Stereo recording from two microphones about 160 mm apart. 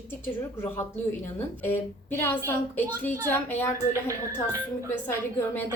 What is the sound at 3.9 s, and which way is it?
Speech, 20° right (ahead or behind).